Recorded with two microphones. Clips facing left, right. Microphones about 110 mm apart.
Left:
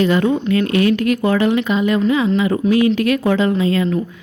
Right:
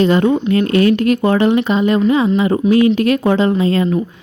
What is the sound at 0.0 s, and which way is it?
Speech, 30° right (ahead or behind).